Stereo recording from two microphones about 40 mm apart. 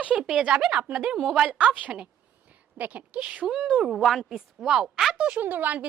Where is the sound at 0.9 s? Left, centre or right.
Right.